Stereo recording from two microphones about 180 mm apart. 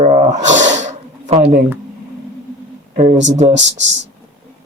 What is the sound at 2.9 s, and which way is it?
Speech, 45° right (ahead or behind).